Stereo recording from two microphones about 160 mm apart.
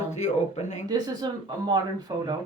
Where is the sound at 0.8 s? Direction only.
25° right (ahead or behind).